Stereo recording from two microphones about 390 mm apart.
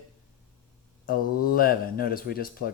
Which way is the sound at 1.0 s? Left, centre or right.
Left.